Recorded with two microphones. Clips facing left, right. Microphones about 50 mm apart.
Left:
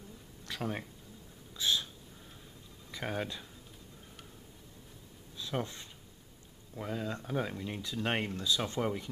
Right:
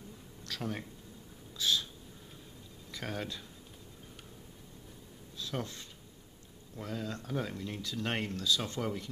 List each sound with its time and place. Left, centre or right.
0.5 s speech: centre
1.6 s a sound: left
2.9 s speech: centre
5.4 s speech: centre